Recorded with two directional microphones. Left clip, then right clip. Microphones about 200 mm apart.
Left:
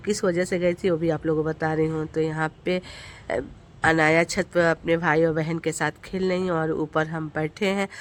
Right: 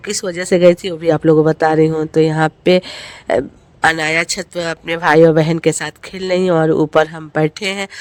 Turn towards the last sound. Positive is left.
turn(degrees=-35)  # may be behind; listen again after turning